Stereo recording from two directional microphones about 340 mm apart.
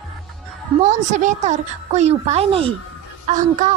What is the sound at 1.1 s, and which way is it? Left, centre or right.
A woman's voice, right.